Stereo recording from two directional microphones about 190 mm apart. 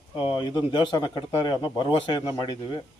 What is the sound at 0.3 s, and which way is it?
Speech, 25° left (ahead or behind).